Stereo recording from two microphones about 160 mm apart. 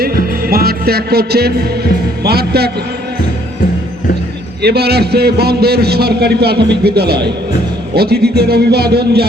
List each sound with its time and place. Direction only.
0.4 s music: 70° right (ahead or behind)
2.2 s a man's voice: 80° right
4.6 s a man's voice: 90° right